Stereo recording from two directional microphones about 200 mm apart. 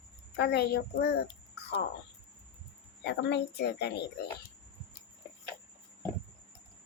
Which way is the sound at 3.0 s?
60° left (ahead or behind).